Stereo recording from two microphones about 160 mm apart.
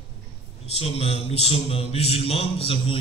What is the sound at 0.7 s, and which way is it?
Mantra, 40° left (ahead or behind).